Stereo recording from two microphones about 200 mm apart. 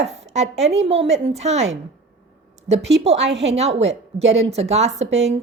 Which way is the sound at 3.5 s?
30° right (ahead or behind).